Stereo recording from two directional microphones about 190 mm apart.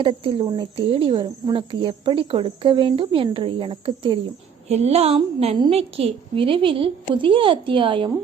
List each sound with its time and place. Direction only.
0.0 s speech: 25° right (ahead or behind)